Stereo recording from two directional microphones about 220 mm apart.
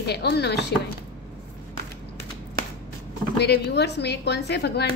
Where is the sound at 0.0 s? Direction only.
50° left (ahead or behind).